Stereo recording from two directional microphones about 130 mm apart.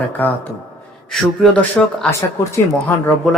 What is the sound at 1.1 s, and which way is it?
Speech, 5° left (ahead or behind).